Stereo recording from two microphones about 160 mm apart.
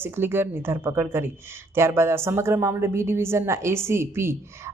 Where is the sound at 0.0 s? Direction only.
15° right (ahead or behind).